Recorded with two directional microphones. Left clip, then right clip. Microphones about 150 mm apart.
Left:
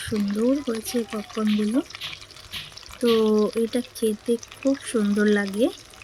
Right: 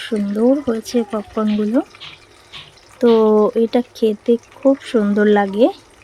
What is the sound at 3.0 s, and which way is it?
Speech, 20° right (ahead or behind).